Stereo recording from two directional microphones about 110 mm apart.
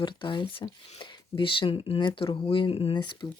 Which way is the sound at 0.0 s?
45° left (ahead or behind).